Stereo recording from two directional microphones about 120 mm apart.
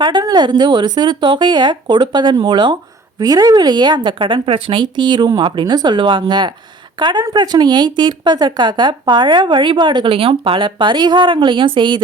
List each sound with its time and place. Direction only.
0.0 s speech: 40° right (ahead or behind)